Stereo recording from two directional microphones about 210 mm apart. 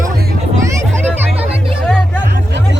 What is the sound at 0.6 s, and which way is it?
Music, 10° right (ahead or behind).